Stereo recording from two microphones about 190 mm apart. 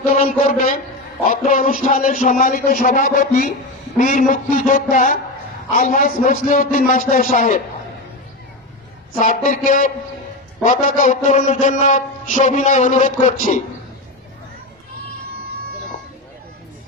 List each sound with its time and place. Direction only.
0.0 s a man's voice: 50° left (ahead or behind)
9.1 s a man's voice: 45° left (ahead or behind)